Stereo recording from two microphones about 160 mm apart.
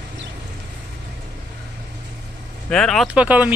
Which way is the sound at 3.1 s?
10° right (ahead or behind).